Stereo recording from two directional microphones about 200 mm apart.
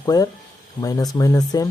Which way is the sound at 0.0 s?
15° left (ahead or behind).